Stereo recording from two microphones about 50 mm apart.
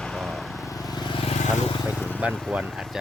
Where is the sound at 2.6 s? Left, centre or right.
Centre.